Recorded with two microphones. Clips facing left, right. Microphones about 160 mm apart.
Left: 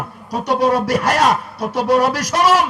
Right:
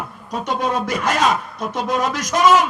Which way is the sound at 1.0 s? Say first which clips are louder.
Left 3 dB; 65° left (ahead or behind).